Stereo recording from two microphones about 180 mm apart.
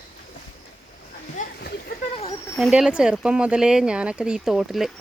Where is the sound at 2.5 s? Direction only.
Centre (ahead or behind).